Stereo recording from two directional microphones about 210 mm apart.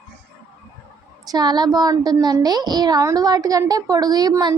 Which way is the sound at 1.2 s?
20° right (ahead or behind).